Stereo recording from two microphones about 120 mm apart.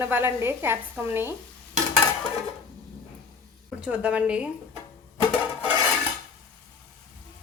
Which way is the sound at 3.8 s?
10° right (ahead or behind).